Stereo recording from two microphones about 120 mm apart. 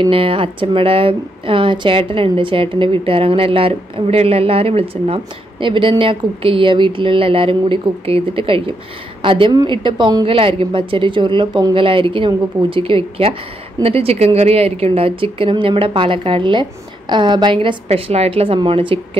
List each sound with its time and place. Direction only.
0.0 s a woman's voice: 50° right (ahead or behind)
17.8 s speech: 55° right (ahead or behind)